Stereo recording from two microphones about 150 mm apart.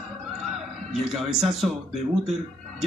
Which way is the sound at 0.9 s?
Centre (ahead or behind).